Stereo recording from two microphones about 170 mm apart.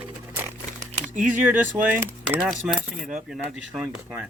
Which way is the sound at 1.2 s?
10° right (ahead or behind).